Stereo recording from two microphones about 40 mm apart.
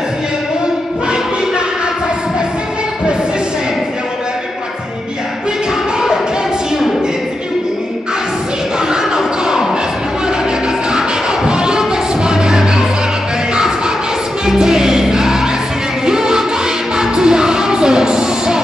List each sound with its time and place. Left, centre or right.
8.9 s music: centre
10.9 s music: right
14.4 s music: centre